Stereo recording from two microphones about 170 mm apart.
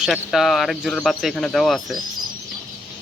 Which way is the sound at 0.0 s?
Centre (ahead or behind).